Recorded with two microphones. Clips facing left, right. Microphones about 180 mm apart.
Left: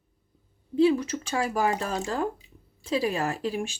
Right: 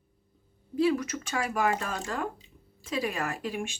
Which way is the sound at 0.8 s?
30° left (ahead or behind).